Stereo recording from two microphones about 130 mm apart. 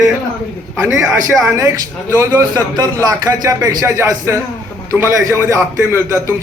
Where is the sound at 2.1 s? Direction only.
25° right (ahead or behind).